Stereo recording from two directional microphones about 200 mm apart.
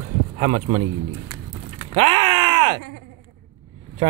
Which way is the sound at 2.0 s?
30° right (ahead or behind).